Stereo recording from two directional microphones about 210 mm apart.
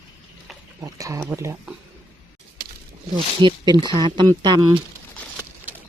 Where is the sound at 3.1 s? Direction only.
20° right (ahead or behind).